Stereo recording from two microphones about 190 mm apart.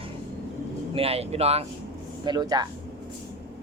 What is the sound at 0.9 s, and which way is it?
Speech, 30° right (ahead or behind).